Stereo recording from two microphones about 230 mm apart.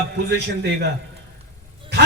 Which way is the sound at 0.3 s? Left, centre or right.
Right.